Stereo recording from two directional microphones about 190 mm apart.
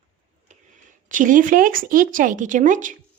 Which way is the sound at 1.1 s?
45° right (ahead or behind).